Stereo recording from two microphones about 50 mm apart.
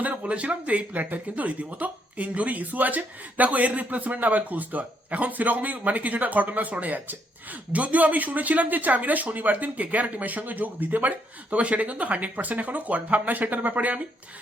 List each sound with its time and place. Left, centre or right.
0.0 s speech: right